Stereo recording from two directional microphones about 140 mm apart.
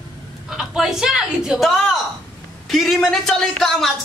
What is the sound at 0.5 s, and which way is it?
A man's voice, 5° right (ahead or behind).